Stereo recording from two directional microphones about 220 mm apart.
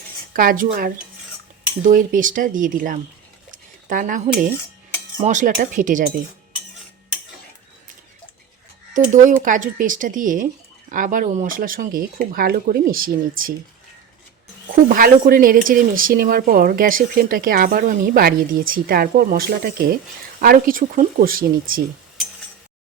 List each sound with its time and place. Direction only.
0.3 s speech: 40° right (ahead or behind)
3.5 s a sound: 35° right (ahead or behind)
5.2 s speech: 35° right (ahead or behind)
8.9 s speech: 35° right (ahead or behind)
14.8 s speech: 40° right (ahead or behind)